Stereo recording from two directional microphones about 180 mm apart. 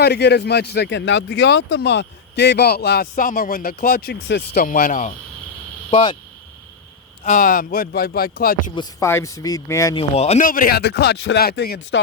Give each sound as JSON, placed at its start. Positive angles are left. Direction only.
{"t": 0.0, "sound": "speech", "side_deg": 65}
{"t": 5.9, "sound": "speech", "side_deg": 25}
{"t": 7.3, "sound": "speech", "side_deg": 50}
{"t": 8.7, "sound": "speech", "side_deg": 20}
{"t": 9.9, "sound": "speech", "side_deg": 35}
{"t": 10.4, "sound": "speech", "side_deg": 50}